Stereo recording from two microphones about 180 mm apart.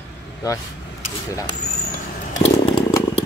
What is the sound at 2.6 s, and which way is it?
Chainsaw, 25° left (ahead or behind).